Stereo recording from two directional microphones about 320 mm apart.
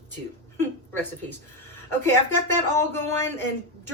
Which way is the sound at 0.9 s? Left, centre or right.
Centre.